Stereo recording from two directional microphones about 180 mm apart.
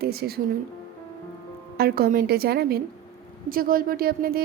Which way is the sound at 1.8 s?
60° right (ahead or behind).